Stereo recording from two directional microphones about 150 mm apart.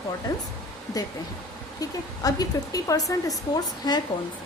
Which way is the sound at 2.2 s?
25° left (ahead or behind).